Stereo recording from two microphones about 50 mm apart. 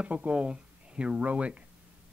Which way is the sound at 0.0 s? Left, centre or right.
Right.